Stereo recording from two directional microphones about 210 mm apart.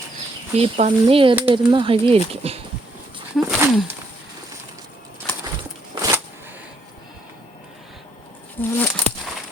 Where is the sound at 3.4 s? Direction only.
5° right (ahead or behind).